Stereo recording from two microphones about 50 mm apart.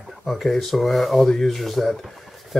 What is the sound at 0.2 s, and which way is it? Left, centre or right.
Speech, centre.